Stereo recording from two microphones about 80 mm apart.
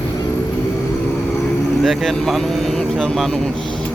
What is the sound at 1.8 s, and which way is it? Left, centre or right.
Speech, centre.